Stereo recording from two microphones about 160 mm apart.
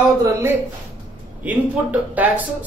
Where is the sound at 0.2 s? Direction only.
15° right (ahead or behind).